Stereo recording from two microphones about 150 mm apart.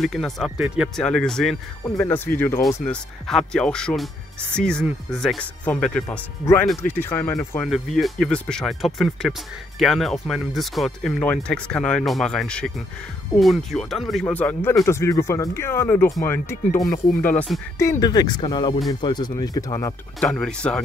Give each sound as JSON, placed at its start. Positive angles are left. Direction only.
{"t": 0.0, "sound": "speech", "side_deg": 0}
{"t": 2.0, "sound": "speech", "side_deg": 15}
{"t": 6.0, "sound": "speech", "side_deg": 15}
{"t": 7.6, "sound": "speech", "side_deg": 0}
{"t": 20.2, "sound": "speech", "side_deg": 5}